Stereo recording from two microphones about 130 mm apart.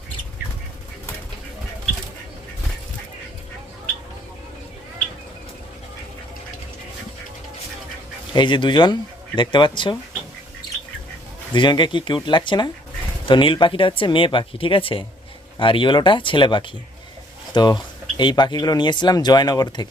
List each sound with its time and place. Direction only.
8.3 s speech: 35° left (ahead or behind)
11.5 s speech: 35° left (ahead or behind)